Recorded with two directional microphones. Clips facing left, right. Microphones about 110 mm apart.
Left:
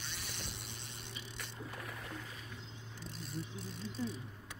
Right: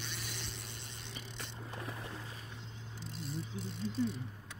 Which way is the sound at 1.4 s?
25° right (ahead or behind).